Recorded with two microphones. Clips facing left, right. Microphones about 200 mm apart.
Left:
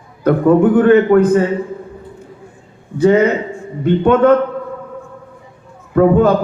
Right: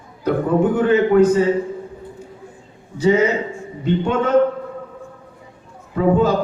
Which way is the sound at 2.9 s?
55° left (ahead or behind).